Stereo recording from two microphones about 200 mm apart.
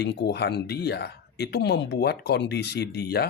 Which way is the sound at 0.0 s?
55° left (ahead or behind).